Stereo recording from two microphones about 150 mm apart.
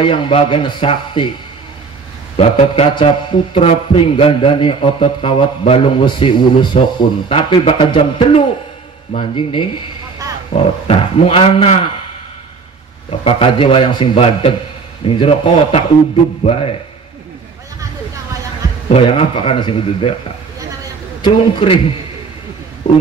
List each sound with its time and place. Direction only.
0.0 s a man's voice: 35° left (ahead or behind)
2.6 s a man's voice: 40° left (ahead or behind)
13.2 s a man's voice: 40° left (ahead or behind)
18.9 s a man's voice: 35° left (ahead or behind)
21.2 s a man's voice: 35° left (ahead or behind)